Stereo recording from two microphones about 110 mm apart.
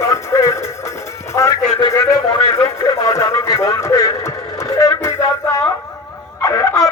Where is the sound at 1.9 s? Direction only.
30° left (ahead or behind).